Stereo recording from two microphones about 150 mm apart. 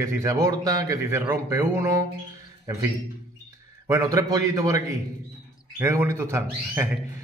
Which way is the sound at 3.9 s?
20° right (ahead or behind).